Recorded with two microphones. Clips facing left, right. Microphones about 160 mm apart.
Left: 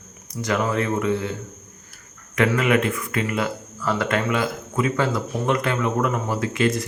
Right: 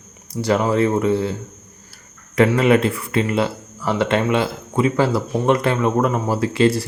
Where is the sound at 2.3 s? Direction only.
30° right (ahead or behind).